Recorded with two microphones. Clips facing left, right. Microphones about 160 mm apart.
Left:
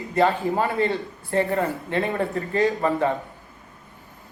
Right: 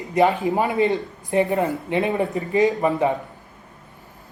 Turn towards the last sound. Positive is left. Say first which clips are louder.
# right 2 dB
turn(degrees=-15)  # may be behind; listen again after turning